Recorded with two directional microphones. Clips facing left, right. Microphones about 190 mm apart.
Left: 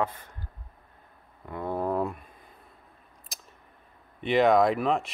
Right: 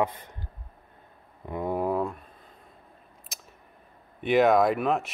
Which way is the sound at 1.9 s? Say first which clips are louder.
Even; 5° left (ahead or behind).